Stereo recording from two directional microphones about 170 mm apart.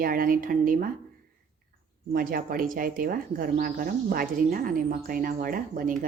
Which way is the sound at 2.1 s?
55° right (ahead or behind).